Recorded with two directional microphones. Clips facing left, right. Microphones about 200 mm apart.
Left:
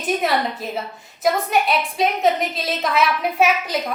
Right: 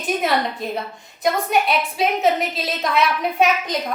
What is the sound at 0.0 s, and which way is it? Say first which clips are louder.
A woman's voice: even; centre (ahead or behind).